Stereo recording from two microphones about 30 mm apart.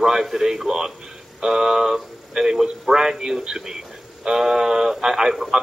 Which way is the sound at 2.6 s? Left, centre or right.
Centre.